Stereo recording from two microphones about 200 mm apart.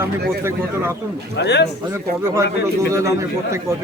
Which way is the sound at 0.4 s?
10° right (ahead or behind).